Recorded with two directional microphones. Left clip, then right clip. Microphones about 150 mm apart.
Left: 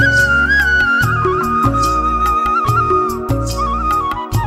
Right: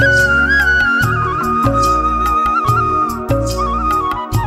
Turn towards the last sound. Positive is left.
turn(degrees=0)  # may be behind; listen again after turning